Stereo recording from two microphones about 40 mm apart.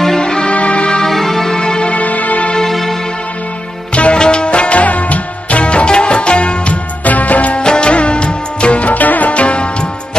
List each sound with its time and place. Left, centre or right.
0.2 s music: left
1.0 s music: centre
1.6 s music: left
2.0 s music: left
2.7 s music: centre
3.9 s music: left
7.1 s music: left
7.5 s music: left
9.3 s music: left